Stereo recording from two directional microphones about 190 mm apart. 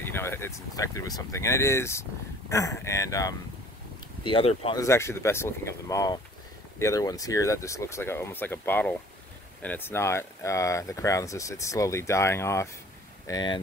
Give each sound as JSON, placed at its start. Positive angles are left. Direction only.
{"t": 0.0, "sound": "speech", "side_deg": 10}
{"t": 4.2, "sound": "speech", "side_deg": 30}
{"t": 4.7, "sound": "speech", "side_deg": 15}